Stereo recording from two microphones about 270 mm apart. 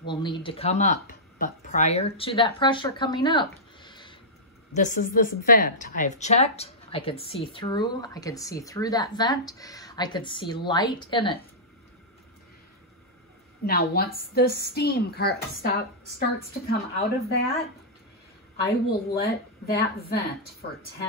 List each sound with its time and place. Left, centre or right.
0.0 s speech: centre
4.7 s a woman's voice: left
13.7 s a woman's voice: left
18.9 s a woman's voice: left